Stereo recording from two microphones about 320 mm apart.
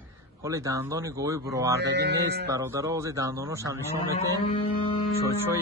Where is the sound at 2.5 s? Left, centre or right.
Centre.